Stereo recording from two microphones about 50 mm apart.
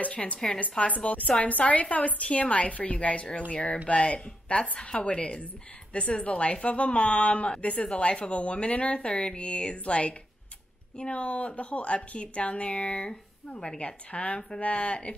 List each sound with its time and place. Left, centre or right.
0.0 s a woman's voice: left